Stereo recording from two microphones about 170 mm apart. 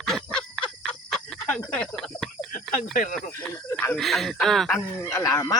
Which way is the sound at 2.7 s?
50° left (ahead or behind).